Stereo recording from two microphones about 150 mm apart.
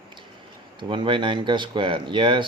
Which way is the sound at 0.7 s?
35° right (ahead or behind).